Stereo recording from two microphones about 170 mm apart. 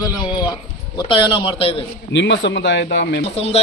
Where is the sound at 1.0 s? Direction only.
30° left (ahead or behind).